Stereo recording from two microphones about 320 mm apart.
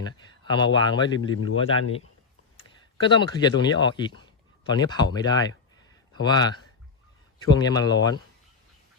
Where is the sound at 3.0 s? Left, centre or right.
Centre.